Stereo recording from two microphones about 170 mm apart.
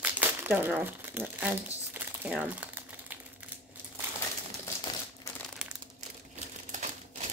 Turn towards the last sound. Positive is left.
turn(degrees=-45)  # may be behind; listen again after turning